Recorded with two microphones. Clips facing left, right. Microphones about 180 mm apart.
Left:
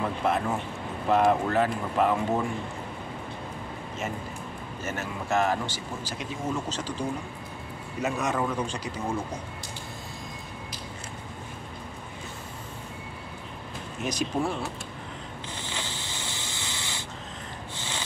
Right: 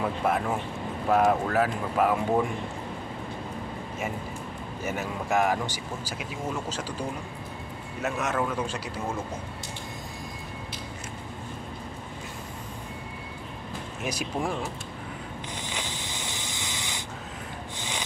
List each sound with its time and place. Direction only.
0.0 s speech: 10° right (ahead or behind)
4.8 s a man's voice: 15° right (ahead or behind)
14.0 s speech: 10° right (ahead or behind)
15.6 s rub: 15° right (ahead or behind)
17.7 s snort: 15° right (ahead or behind)